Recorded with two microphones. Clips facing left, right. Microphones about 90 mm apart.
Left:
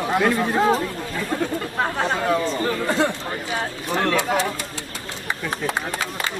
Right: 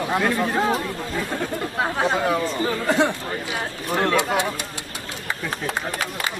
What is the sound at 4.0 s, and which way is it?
Speech, 10° right (ahead or behind).